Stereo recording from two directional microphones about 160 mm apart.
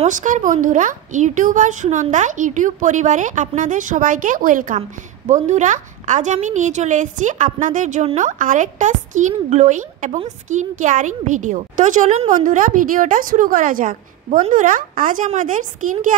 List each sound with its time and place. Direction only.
0.0 s a woman's voice: 50° right (ahead or behind)